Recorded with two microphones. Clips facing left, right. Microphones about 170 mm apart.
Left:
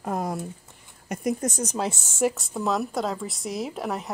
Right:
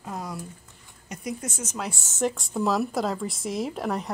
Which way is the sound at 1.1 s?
50° left (ahead or behind).